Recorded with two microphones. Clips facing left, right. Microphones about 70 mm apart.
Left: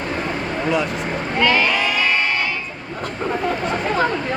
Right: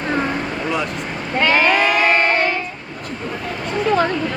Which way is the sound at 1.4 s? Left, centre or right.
Right.